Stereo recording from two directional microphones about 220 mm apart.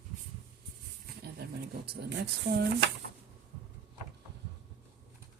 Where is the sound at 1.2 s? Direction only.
45° right (ahead or behind).